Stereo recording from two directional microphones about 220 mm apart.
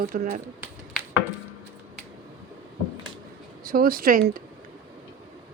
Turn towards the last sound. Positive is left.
turn(degrees=-40)  # may be behind; listen again after turning